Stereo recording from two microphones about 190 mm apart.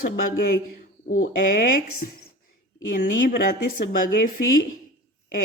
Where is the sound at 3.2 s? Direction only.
50° left (ahead or behind).